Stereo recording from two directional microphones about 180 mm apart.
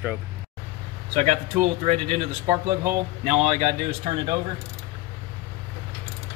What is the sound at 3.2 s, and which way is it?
Speech, 35° right (ahead or behind).